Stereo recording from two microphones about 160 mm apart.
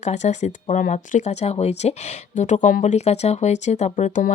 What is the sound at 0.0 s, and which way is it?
Speech, 45° left (ahead or behind).